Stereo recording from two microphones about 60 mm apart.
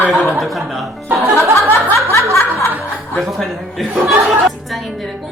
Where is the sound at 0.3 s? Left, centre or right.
Centre.